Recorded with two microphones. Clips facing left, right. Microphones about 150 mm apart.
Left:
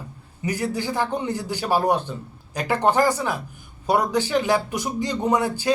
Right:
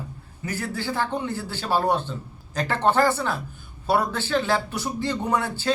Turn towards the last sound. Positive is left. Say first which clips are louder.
# left 3 dB
turn(degrees=15)  # may be behind; listen again after turning